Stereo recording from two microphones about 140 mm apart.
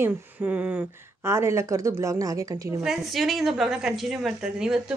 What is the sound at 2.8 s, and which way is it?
A woman's voice, centre (ahead or behind).